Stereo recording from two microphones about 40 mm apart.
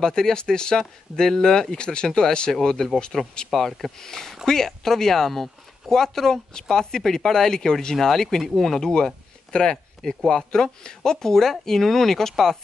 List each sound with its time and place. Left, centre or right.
0.0 s speech: centre
3.1 s speech: centre